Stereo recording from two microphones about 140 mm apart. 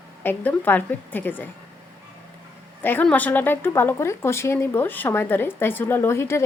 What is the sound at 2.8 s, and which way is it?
A woman's voice, 15° left (ahead or behind).